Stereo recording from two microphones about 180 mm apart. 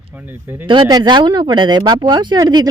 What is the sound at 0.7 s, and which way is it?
Speech, 25° right (ahead or behind).